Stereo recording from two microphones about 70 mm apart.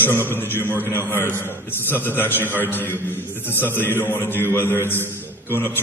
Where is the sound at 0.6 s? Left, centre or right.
Right.